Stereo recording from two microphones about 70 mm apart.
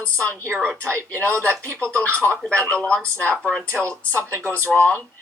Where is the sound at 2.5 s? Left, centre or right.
Centre.